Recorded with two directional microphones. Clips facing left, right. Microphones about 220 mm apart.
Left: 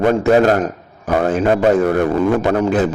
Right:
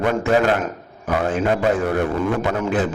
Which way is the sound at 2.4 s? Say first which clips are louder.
Left 6 dB; 40° left (ahead or behind).